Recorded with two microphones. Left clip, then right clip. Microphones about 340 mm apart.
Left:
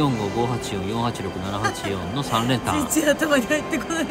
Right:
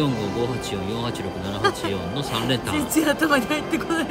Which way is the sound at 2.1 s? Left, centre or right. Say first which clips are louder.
Left 4 dB; centre.